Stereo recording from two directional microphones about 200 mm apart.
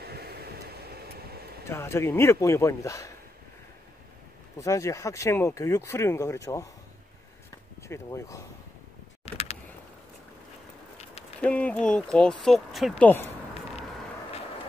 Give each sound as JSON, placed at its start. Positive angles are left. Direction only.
{"t": 0.0, "sound": "vehicle", "side_deg": -50}
{"t": 1.7, "sound": "speech", "side_deg": 15}
{"t": 4.6, "sound": "speech", "side_deg": 15}
{"t": 7.9, "sound": "speech", "side_deg": 15}
{"t": 9.2, "sound": "a sound", "side_deg": 30}
{"t": 11.4, "sound": "speech", "side_deg": 5}